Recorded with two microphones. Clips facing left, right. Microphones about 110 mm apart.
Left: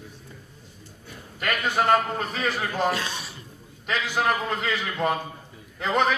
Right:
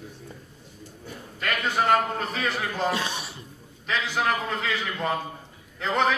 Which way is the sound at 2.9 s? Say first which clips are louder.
Even; 25° right (ahead or behind).